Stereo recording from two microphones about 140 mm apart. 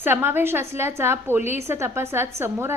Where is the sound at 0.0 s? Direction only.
15° right (ahead or behind).